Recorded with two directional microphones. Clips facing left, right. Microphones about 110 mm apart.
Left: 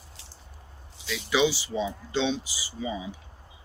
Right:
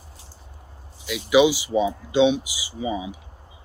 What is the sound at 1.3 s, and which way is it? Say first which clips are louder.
Speech: right 8 dB; 15° right (ahead or behind).